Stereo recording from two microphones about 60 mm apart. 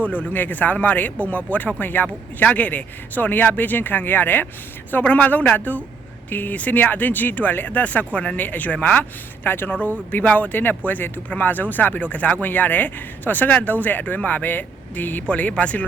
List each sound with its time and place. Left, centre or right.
0.0 s speech: left